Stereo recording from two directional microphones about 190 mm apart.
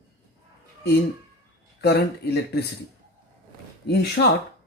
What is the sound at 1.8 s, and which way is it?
Speech, 60° left (ahead or behind).